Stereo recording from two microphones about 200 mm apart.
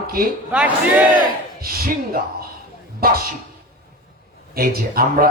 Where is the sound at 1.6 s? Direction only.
45° right (ahead or behind).